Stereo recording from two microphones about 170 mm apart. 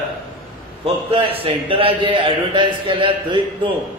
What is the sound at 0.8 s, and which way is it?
A man's voice, 30° right (ahead or behind).